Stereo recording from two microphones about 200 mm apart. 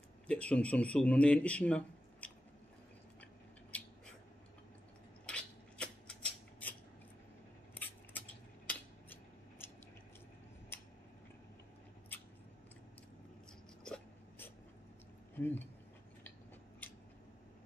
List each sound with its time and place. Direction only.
0.3 s a man's voice: 5° left (ahead or behind)
3.7 s cat: 5° left (ahead or behind)
5.2 s a sound: 5° left (ahead or behind)
7.7 s scissors: 10° left (ahead or behind)
13.8 s dog: 5° left (ahead or behind)
15.3 s a sound: 10° left (ahead or behind)